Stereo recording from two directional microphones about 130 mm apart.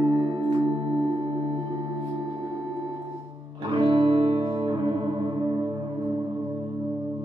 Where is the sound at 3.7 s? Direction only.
40° right (ahead or behind).